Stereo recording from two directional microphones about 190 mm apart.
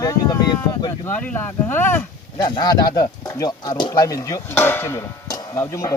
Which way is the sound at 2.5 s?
20° left (ahead or behind).